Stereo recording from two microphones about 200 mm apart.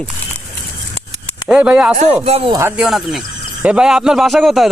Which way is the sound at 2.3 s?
30° right (ahead or behind).